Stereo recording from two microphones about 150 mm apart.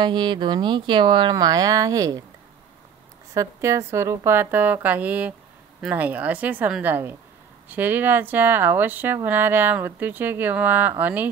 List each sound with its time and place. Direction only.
0.0 s speech: 30° right (ahead or behind)
3.3 s speech: 20° right (ahead or behind)